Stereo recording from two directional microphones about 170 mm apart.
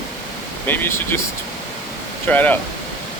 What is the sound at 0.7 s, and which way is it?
Speech, 15° left (ahead or behind).